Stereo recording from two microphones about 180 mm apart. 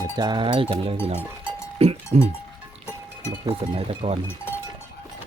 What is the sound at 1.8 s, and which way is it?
Music, 35° right (ahead or behind).